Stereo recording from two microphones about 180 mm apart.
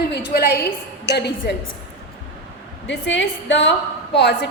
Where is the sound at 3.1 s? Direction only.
90° left.